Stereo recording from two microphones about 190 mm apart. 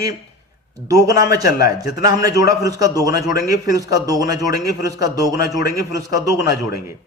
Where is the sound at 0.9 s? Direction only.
20° right (ahead or behind).